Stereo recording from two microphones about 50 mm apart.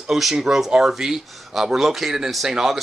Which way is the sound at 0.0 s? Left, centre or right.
Centre.